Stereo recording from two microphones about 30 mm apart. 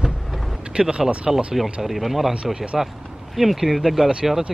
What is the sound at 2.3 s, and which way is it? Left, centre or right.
Speech, right.